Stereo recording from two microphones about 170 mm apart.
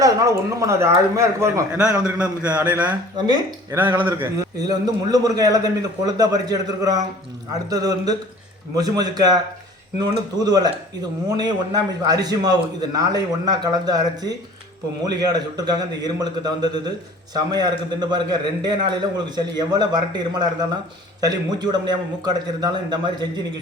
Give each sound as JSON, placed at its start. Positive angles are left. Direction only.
{"t": 0.0, "sound": "speech", "side_deg": -20}
{"t": 3.2, "sound": "a man's voice", "side_deg": -25}
{"t": 3.8, "sound": "a man's voice", "side_deg": -10}